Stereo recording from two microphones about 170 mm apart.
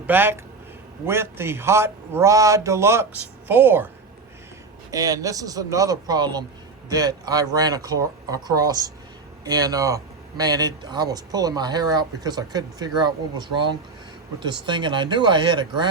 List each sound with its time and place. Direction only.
0.1 s a man's voice: 10° right (ahead or behind)
4.9 s speech: 20° right (ahead or behind)